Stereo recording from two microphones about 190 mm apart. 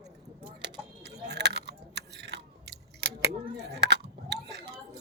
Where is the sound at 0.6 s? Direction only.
65° right (ahead or behind).